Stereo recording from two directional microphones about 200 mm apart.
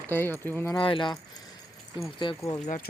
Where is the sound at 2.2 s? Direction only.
25° left (ahead or behind).